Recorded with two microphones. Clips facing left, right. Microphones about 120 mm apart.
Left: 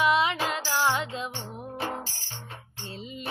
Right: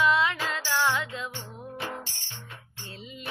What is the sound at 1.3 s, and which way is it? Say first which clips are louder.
Music: left 2 dB; 30° left (ahead or behind).